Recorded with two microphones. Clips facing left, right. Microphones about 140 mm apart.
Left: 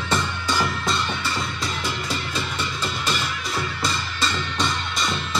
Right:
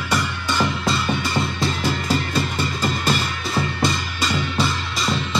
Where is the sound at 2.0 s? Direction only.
40° right (ahead or behind).